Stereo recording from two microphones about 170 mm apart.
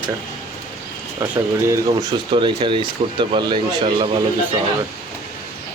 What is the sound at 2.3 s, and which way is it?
Speech, 30° right (ahead or behind).